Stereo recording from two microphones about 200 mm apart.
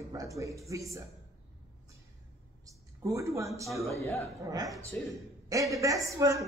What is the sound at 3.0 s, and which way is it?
Speech, 15° right (ahead or behind).